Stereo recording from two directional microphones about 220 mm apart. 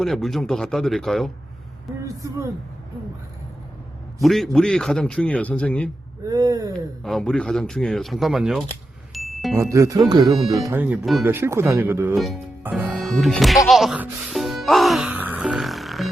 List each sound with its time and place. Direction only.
0.0 s a man's voice: centre (ahead or behind)
4.2 s a man's voice: centre (ahead or behind)
6.2 s speech: 15° right (ahead or behind)
7.0 s a man's voice: centre (ahead or behind)
9.1 s music: centre (ahead or behind)
9.6 s speech: 15° right (ahead or behind)
10.2 s a man's voice: centre (ahead or behind)
10.6 s speech: 10° right (ahead or behind)
12.1 s music: centre (ahead or behind)